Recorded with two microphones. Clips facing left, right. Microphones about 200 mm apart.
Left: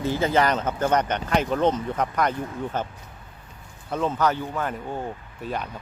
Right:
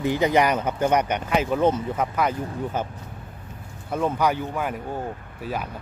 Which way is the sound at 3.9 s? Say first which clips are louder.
Right 1 dB; 10° right (ahead or behind).